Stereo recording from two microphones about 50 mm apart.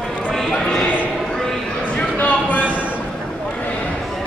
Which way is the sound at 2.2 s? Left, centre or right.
Left.